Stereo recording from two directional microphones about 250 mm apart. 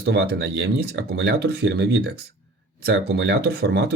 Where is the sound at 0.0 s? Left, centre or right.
Right.